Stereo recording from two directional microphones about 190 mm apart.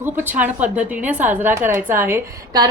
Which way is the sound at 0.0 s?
10° right (ahead or behind).